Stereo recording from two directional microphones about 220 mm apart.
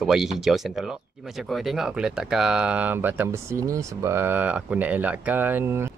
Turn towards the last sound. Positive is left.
turn(degrees=-10)  # may be behind; listen again after turning